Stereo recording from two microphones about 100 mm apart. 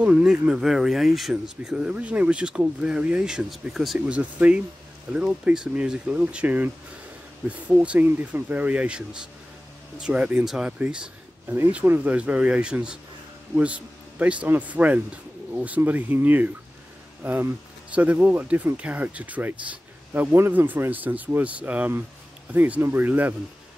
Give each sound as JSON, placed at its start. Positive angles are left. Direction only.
{"t": 0.0, "sound": "speech", "side_deg": -10}
{"t": 4.1, "sound": "speech", "side_deg": -15}
{"t": 11.4, "sound": "speech", "side_deg": -25}